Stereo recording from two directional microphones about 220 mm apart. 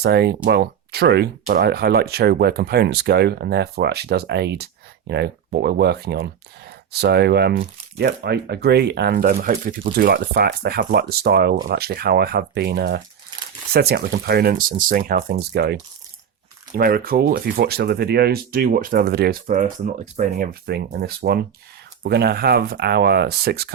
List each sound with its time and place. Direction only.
0.0 s speech: 50° right (ahead or behind)